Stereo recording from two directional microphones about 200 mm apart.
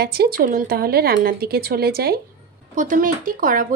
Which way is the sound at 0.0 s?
50° right (ahead or behind).